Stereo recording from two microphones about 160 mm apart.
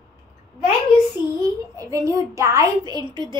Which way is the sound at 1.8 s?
20° right (ahead or behind).